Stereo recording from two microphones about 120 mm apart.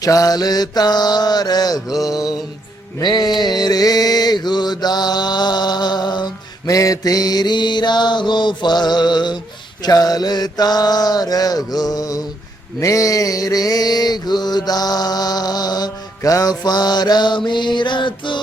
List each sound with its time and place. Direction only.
0.0 s mantra: 30° left (ahead or behind)